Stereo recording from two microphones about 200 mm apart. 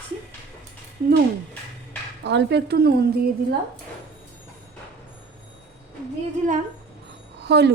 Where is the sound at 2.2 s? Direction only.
60° right (ahead or behind).